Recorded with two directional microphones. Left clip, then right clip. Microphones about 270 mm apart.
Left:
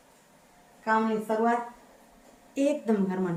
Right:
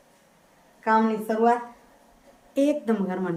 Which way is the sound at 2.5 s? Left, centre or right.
Centre.